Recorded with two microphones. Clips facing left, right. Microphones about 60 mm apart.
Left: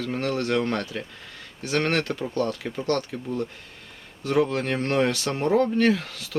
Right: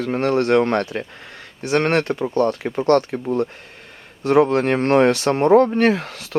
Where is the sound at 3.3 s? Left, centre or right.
Right.